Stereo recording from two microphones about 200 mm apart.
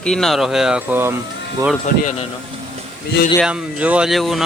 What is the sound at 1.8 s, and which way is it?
Speech, 40° left (ahead or behind).